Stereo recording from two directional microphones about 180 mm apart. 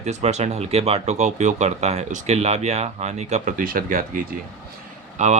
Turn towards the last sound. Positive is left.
turn(degrees=-40)  # may be behind; listen again after turning